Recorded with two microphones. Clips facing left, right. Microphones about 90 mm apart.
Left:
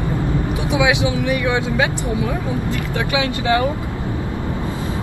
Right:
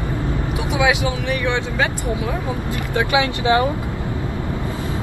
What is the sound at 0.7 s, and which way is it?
Speech, 15° left (ahead or behind).